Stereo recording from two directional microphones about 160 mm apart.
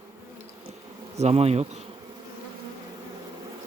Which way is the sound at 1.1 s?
40° right (ahead or behind).